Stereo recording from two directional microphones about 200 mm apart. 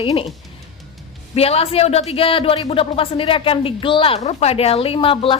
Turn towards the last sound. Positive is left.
turn(degrees=25)  # may be behind; listen again after turning